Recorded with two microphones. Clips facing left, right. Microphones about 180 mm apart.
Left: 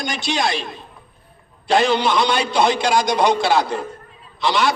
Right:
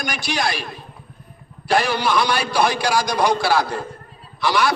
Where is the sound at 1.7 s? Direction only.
20° left (ahead or behind).